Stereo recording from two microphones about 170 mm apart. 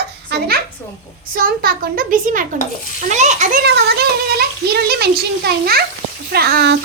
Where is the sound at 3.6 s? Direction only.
75° right (ahead or behind).